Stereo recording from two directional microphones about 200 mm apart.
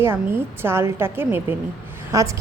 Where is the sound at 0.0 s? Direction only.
10° right (ahead or behind).